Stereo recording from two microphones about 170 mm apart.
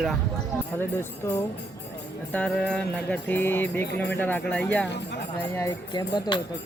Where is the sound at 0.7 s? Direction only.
15° left (ahead or behind).